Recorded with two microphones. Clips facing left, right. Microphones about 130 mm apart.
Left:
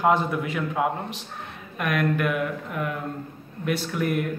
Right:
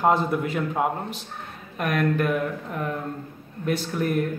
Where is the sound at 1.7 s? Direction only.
40° right (ahead or behind).